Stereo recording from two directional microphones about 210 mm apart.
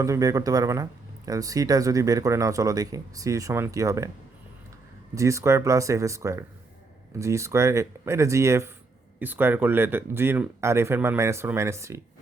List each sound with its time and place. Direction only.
0.0 s speech: 15° right (ahead or behind)
5.1 s speech: 15° right (ahead or behind)